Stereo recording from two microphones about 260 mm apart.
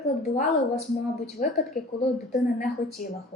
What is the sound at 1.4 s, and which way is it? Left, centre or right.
Speech, left.